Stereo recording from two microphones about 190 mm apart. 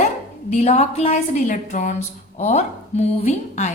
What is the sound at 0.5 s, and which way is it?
A woman's voice, 35° left (ahead or behind).